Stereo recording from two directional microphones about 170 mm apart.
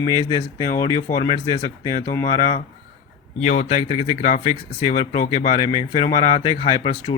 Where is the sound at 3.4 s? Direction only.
40° left (ahead or behind).